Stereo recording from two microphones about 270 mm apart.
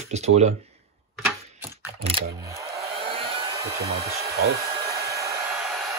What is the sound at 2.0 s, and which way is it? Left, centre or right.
Speech, centre.